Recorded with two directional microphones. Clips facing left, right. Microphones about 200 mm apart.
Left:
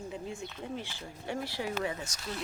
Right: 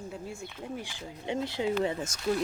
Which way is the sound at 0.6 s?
10° right (ahead or behind).